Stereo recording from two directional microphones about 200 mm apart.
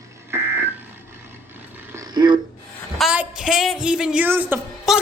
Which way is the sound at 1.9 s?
20° right (ahead or behind).